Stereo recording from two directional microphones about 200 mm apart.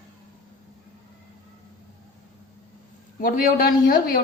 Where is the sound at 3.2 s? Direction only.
45° left (ahead or behind).